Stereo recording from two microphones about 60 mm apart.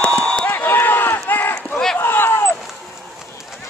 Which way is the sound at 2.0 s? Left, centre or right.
Left.